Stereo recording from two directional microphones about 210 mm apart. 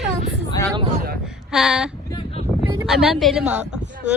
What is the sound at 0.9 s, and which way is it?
Speech, 45° right (ahead or behind).